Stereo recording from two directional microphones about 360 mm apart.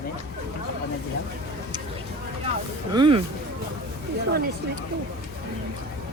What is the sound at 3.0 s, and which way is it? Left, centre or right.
Speech, centre.